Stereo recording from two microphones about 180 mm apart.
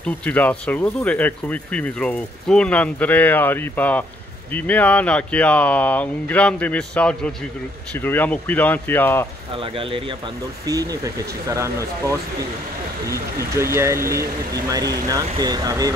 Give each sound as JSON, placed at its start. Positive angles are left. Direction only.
{"t": 0.0, "sound": "speech", "side_deg": 10}
{"t": 9.6, "sound": "speech", "side_deg": -30}
{"t": 10.6, "sound": "speech", "side_deg": -20}